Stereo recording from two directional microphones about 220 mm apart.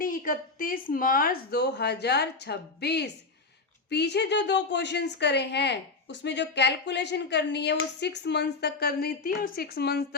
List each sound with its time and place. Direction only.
0.0 s a woman's voice: 40° left (ahead or behind)